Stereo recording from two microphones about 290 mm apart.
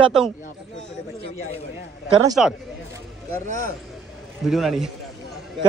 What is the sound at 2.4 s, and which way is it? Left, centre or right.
Speech, centre.